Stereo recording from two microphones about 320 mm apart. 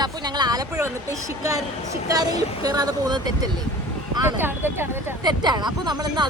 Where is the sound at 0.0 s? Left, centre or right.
Centre.